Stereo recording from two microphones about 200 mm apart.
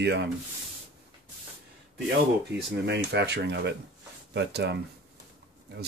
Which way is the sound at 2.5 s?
55° right (ahead or behind).